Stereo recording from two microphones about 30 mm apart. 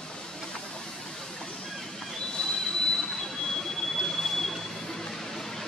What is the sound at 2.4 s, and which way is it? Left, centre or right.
Train, left.